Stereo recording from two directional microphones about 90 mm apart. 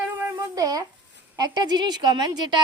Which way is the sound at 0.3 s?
45° right (ahead or behind).